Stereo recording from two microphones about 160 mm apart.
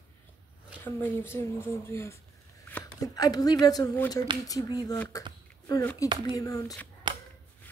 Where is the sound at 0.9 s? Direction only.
15° left (ahead or behind).